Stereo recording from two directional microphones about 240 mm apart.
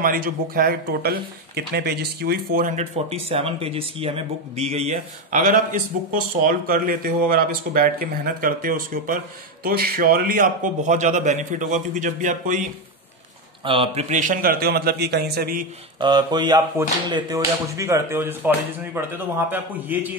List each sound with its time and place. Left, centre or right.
0.0 s speech: right
13.7 s speech: right
16.0 s speech: centre